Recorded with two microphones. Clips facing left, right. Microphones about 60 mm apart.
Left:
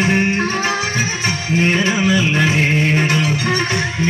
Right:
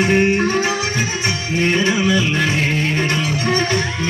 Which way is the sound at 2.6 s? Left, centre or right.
Left.